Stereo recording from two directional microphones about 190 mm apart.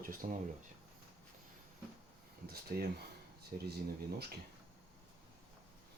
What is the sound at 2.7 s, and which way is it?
Speech, 50° right (ahead or behind).